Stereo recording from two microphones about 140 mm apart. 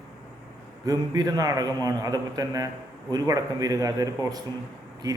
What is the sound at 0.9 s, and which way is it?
A man's voice, 30° right (ahead or behind).